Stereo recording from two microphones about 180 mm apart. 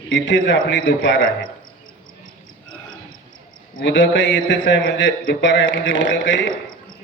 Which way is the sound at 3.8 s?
90° left.